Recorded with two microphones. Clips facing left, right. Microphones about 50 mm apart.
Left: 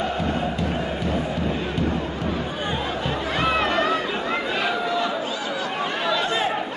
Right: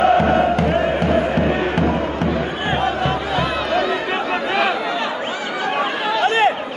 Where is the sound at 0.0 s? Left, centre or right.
Right.